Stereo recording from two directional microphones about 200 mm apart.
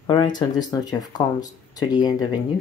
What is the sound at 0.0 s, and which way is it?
Speech, 20° left (ahead or behind).